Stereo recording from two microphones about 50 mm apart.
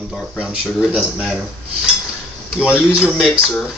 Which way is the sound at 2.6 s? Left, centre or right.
Right.